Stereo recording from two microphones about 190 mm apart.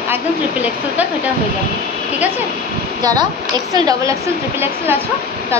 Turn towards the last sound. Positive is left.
turn(degrees=-10)  # may be behind; listen again after turning